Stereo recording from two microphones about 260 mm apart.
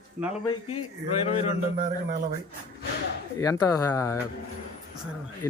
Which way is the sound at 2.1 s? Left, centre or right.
Right.